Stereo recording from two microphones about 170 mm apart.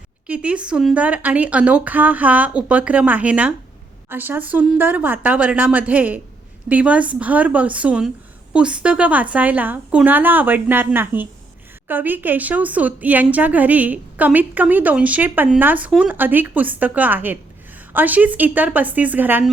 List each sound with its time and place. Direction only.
0.3 s a woman's voice: 5° right (ahead or behind)